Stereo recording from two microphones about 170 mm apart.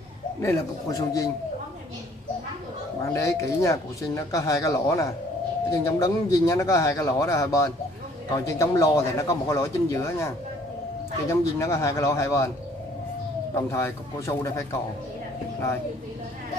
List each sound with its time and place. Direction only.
0.4 s a man's voice: 20° left (ahead or behind)
3.0 s speech: 15° left (ahead or behind)
13.6 s speech: 15° left (ahead or behind)